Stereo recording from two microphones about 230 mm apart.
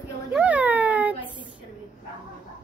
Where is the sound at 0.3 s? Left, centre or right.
Centre.